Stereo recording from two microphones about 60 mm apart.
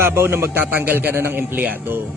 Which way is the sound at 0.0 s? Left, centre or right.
Right.